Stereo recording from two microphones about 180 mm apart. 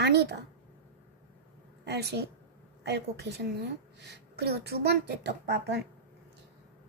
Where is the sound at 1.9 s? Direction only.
65° right (ahead or behind).